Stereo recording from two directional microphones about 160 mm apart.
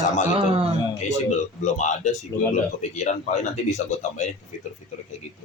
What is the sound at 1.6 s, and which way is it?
Speech, 50° left (ahead or behind).